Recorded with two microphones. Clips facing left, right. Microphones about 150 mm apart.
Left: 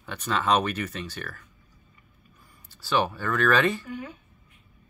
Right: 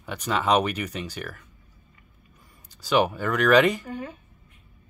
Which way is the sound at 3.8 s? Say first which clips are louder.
Right 2 dB; 35° right (ahead or behind).